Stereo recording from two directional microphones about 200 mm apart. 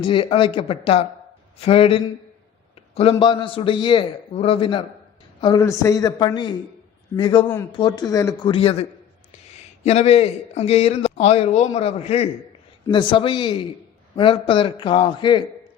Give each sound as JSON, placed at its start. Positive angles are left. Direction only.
{"t": 0.0, "sound": "a man's voice", "side_deg": 25}